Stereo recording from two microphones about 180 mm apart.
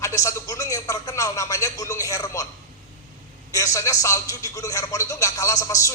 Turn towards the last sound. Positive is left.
turn(degrees=20)  # may be behind; listen again after turning